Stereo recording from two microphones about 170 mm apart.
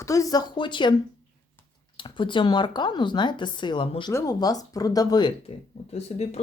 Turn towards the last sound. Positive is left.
turn(degrees=40)  # may be behind; listen again after turning